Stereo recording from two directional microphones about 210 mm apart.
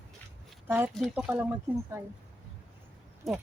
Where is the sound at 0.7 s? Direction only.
10° right (ahead or behind).